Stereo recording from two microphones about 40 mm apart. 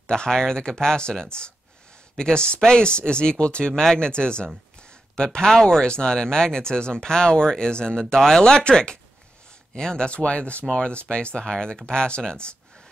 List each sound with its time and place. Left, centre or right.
0.0 s speech: centre
5.6 s speech: centre
5.9 s speech: centre